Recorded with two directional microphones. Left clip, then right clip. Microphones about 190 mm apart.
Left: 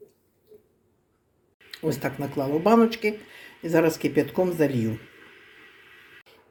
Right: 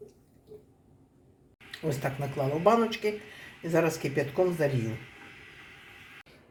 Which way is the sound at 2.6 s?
50° left (ahead or behind).